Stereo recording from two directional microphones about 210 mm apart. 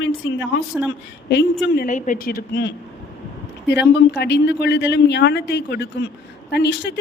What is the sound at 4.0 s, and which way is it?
A man's voice, 55° left (ahead or behind).